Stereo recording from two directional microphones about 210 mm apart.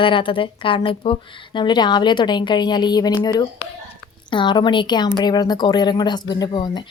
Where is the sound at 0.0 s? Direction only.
25° left (ahead or behind).